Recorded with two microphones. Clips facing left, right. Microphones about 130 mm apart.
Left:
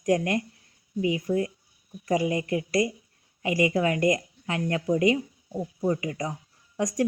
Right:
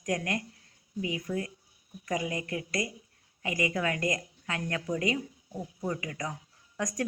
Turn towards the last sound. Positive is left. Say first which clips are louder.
# left 6 dB
turn(degrees=25)  # may be behind; listen again after turning